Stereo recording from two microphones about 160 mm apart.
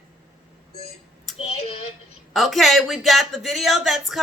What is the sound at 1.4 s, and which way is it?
Child singing, 40° left (ahead or behind).